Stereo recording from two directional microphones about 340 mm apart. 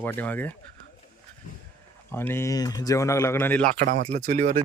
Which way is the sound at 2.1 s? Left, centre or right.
Centre.